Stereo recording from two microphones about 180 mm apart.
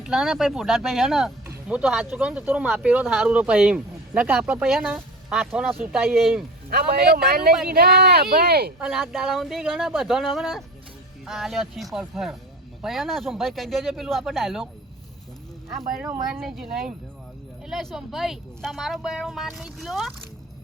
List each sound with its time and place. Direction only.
0.0 s speech: centre (ahead or behind)
6.7 s speech: 60° right (ahead or behind)
8.8 s speech: centre (ahead or behind)
16.4 s speech: centre (ahead or behind)